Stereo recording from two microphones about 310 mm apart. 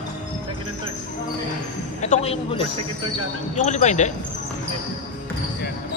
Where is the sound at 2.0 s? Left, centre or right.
Left.